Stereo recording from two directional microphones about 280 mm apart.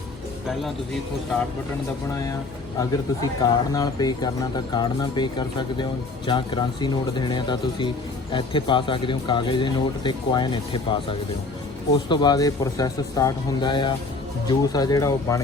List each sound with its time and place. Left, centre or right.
2.7 s speech: centre
12.0 s speech: centre